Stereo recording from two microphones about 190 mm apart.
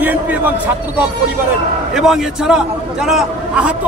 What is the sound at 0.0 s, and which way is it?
A man's voice, 10° right (ahead or behind).